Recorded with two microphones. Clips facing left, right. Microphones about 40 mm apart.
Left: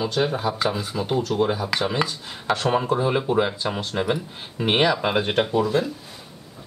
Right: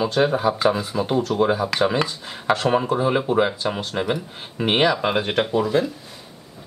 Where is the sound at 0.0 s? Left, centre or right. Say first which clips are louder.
Right 4 dB; centre.